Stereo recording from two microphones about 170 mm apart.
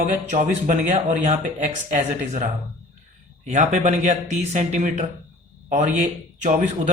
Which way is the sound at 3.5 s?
45° right (ahead or behind).